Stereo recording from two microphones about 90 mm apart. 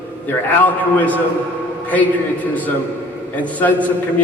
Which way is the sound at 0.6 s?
15° left (ahead or behind).